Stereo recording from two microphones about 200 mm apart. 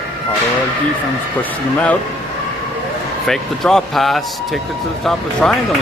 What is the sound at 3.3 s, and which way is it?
Speech, centre (ahead or behind).